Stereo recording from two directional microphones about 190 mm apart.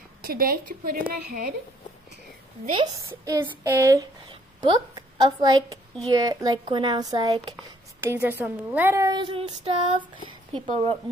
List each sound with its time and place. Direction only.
0.2 s a woman's voice: 50° right (ahead or behind)
3.0 s speech: 15° right (ahead or behind)
8.1 s speech: 10° right (ahead or behind); by 11.0 s 30° right (ahead or behind)